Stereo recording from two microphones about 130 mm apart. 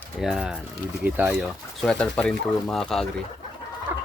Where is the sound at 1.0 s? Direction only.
15° right (ahead or behind).